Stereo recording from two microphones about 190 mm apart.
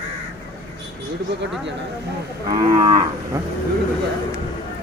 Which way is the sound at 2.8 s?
20° right (ahead or behind).